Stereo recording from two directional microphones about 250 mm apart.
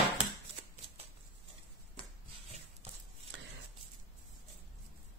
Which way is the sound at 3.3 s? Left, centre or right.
Right.